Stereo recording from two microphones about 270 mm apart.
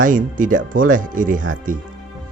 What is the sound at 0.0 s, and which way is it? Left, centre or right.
Speech, right.